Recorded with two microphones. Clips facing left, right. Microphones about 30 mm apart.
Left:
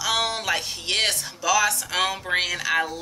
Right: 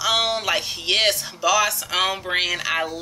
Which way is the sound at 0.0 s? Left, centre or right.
Centre.